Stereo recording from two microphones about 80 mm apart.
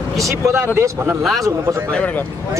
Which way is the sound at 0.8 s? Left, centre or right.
Right.